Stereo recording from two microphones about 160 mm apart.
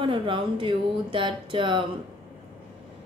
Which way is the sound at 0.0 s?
30° right (ahead or behind).